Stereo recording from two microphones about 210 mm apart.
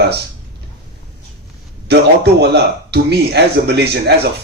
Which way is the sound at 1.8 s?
50° right (ahead or behind).